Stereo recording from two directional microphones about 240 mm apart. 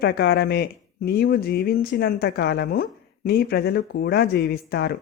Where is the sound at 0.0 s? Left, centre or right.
Left.